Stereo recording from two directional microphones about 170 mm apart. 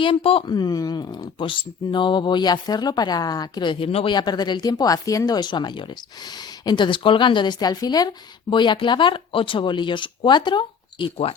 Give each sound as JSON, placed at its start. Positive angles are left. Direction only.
{"t": 0.0, "sound": "speech", "side_deg": 30}